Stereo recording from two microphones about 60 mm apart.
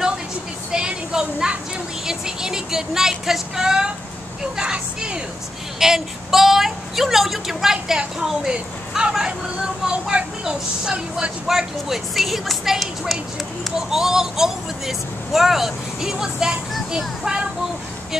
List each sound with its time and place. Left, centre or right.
0.7 s a sound: centre
2.0 s speech: centre
11.4 s speech: centre